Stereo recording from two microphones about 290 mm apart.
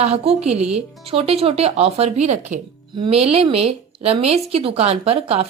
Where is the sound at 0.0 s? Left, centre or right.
Right.